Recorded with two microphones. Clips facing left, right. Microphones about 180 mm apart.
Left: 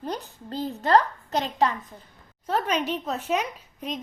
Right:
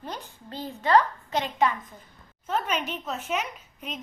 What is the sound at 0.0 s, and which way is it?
A woman's voice, 40° left (ahead or behind).